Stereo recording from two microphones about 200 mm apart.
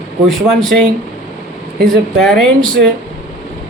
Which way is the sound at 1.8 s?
Centre (ahead or behind).